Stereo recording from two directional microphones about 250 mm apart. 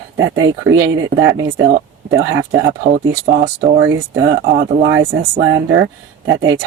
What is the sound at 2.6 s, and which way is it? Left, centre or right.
Speech, right.